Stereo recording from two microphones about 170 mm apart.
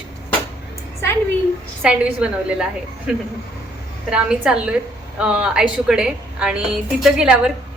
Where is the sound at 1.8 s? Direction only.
5° right (ahead or behind).